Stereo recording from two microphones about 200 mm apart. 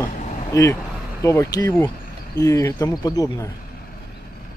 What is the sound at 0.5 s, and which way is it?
Speech, 15° left (ahead or behind).